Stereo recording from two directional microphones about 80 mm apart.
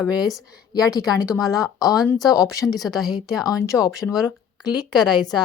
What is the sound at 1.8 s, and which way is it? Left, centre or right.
A woman's voice, left.